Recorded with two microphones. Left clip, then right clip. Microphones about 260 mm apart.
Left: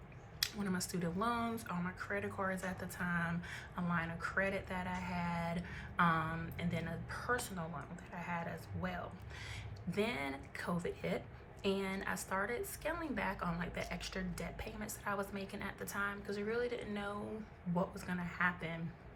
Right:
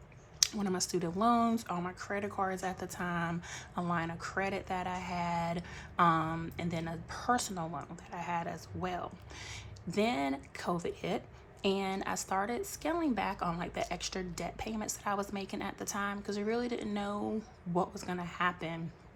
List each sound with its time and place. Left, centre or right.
0.3 s speech: centre